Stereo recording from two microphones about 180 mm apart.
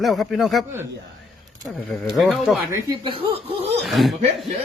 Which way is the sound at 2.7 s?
20° right (ahead or behind).